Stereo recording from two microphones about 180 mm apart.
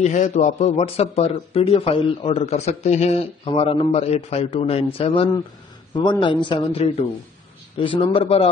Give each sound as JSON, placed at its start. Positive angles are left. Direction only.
{"t": 0.0, "sound": "a man's voice", "side_deg": 40}